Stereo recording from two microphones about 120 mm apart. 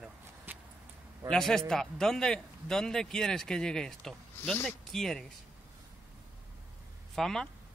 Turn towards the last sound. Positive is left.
turn(degrees=5)  # may be behind; listen again after turning